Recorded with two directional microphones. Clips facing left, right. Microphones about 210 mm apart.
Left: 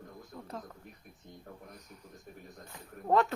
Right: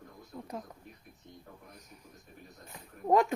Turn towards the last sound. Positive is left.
turn(degrees=-15)  # may be behind; listen again after turning